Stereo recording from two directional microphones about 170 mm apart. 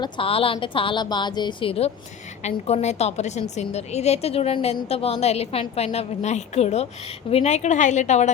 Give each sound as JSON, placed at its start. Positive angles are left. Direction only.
{"t": 0.0, "sound": "a woman's voice", "side_deg": 30}